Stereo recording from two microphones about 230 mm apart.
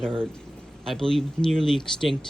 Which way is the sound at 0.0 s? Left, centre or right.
Centre.